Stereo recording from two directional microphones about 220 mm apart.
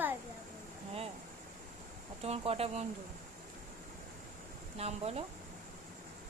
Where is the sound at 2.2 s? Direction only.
25° right (ahead or behind).